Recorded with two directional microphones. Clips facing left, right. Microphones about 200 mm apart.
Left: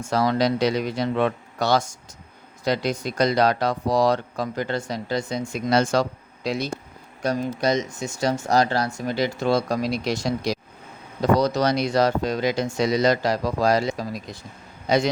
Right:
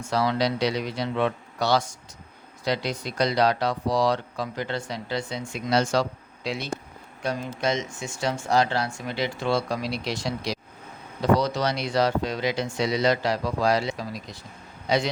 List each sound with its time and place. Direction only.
0.0 s speech: 45° left (ahead or behind)